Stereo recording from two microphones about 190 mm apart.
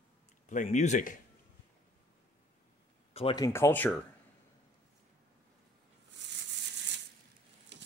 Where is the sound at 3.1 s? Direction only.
25° left (ahead or behind).